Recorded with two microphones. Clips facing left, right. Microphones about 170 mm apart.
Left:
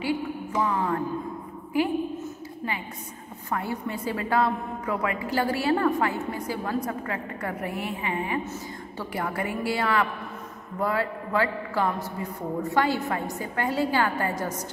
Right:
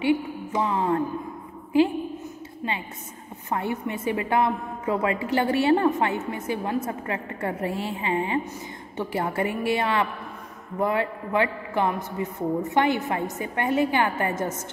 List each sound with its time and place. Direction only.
0.0 s a woman's voice: 20° right (ahead or behind)
3.4 s a woman's voice: 20° right (ahead or behind)